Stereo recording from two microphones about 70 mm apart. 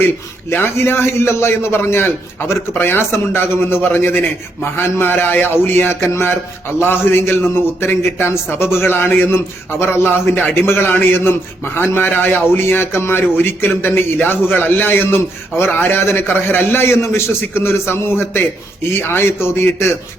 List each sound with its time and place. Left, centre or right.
0.5 s a man's voice: left